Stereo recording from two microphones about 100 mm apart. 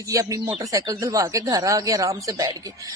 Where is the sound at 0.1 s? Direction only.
30° right (ahead or behind).